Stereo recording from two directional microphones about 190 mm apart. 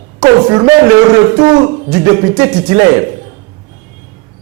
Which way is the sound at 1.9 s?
15° right (ahead or behind).